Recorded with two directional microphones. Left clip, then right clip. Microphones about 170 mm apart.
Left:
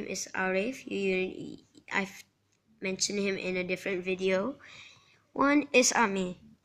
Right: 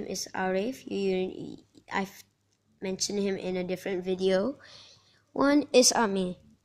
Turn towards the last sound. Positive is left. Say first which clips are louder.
# right 2 dB
turn(degrees=-40)  # may be behind; listen again after turning